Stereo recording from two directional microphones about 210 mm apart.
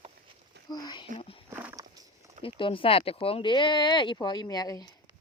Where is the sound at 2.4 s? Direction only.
25° left (ahead or behind).